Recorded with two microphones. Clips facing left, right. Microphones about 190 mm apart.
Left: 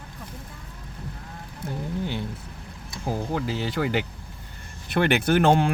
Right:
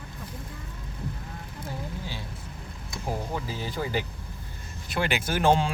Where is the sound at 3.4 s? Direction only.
75° left (ahead or behind).